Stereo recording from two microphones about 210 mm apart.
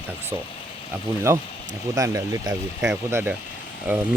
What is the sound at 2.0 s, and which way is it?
Speech, 15° right (ahead or behind).